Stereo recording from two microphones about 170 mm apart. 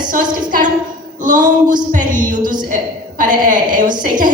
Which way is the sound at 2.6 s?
50° right (ahead or behind).